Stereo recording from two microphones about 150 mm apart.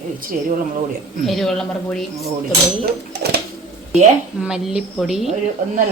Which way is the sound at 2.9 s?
90° right.